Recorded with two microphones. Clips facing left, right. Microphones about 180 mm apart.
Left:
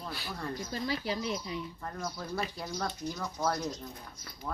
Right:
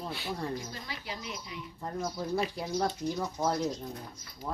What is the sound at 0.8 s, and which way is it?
Speech, 35° left (ahead or behind).